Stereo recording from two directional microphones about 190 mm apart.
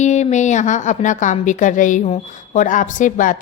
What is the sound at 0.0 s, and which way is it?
A woman's voice, 40° left (ahead or behind).